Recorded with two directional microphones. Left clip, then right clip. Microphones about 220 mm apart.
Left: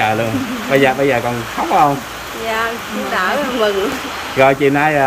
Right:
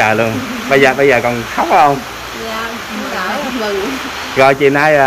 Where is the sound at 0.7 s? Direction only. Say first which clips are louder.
Right 4 dB; 5° left (ahead or behind).